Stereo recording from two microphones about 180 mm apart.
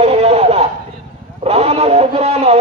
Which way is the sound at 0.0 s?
35° right (ahead or behind).